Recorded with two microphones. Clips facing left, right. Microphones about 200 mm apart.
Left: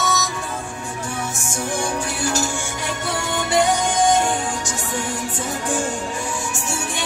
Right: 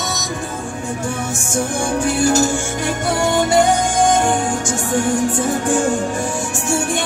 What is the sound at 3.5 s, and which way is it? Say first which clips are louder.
Music: even; 50° right (ahead or behind).